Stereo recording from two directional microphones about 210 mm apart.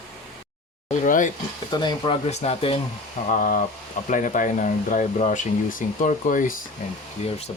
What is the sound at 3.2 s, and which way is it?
Speech, 40° left (ahead or behind).